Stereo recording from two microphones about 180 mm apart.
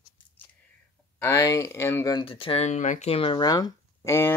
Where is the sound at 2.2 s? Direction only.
30° left (ahead or behind).